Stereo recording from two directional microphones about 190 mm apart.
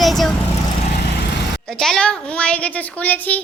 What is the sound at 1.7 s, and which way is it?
A woman's voice, 5° left (ahead or behind).